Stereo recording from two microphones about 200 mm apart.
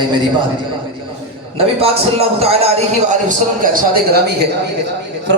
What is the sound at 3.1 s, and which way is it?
A man's voice, 40° right (ahead or behind).